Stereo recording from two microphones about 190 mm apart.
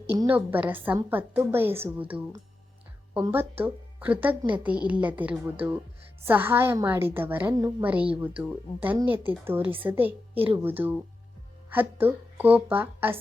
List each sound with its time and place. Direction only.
0.3 s a woman's voice: 10° right (ahead or behind)
10.3 s a woman's voice: 30° right (ahead or behind)
10.6 s a woman's voice: 10° right (ahead or behind)